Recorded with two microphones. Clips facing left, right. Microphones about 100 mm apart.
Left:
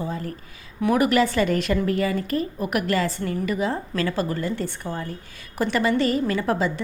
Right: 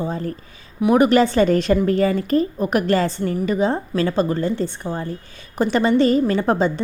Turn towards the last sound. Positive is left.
turn(degrees=-30)  # may be behind; listen again after turning